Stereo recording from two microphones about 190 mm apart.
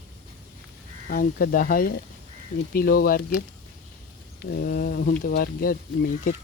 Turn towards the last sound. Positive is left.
turn(degrees=50)  # may be behind; listen again after turning